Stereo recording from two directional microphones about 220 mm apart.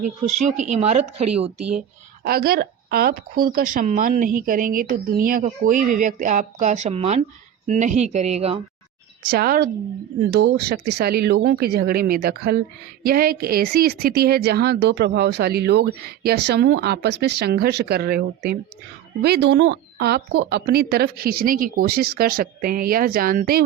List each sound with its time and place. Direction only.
0.0 s speech: 35° right (ahead or behind)
2.2 s speech: 45° right (ahead or behind); by 8.6 s 25° right (ahead or behind)
9.2 s speech: 45° right (ahead or behind)